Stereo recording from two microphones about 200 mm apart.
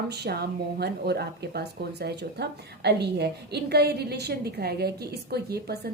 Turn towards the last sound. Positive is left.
turn(degrees=-50)  # may be behind; listen again after turning